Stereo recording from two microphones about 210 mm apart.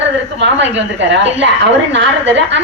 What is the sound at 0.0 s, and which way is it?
A woman's voice, 55° right (ahead or behind).